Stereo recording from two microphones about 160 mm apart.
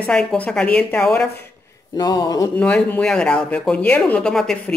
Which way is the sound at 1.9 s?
25° left (ahead or behind).